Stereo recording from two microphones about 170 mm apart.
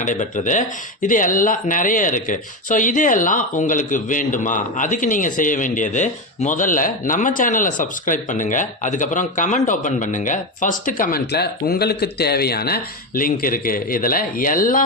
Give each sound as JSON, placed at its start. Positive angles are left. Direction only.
{"t": 0.0, "sound": "speech", "side_deg": 50}